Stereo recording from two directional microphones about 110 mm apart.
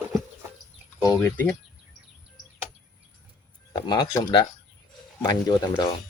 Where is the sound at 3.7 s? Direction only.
40° left (ahead or behind).